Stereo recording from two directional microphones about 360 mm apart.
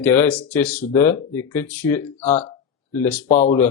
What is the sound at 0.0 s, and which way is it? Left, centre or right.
Speech, centre.